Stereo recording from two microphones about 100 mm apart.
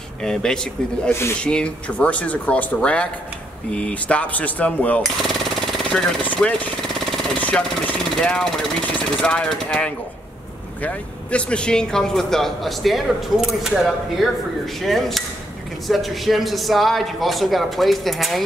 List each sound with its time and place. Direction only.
0.2 s speech: 5° left (ahead or behind)
5.0 s jackhammer: centre (ahead or behind)
6.2 s jackhammer: 15° left (ahead or behind)
7.3 s a sound: 15° left (ahead or behind)
9.2 s a man's voice: 10° left (ahead or behind)